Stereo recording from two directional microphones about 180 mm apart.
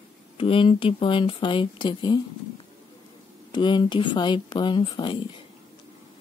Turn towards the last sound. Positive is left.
turn(degrees=30)  # may be behind; listen again after turning